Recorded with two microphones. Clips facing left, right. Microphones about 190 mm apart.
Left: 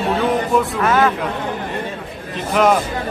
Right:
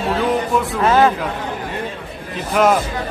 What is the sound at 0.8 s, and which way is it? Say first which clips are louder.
Speech: right 5 dB; 30° right (ahead or behind).